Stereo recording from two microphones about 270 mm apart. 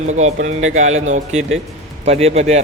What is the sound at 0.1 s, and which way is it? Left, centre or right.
A man's voice, right.